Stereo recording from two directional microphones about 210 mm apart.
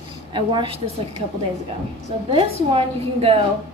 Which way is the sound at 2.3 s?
25° right (ahead or behind).